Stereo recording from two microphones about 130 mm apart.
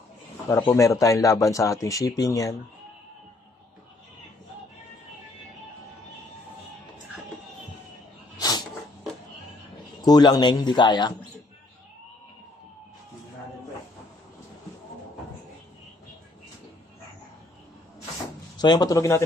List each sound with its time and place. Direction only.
0.7 s speech: 25° left (ahead or behind)
8.4 s dog: 30° left (ahead or behind)
10.0 s a man's voice: 30° left (ahead or behind)
18.6 s speech: 30° left (ahead or behind)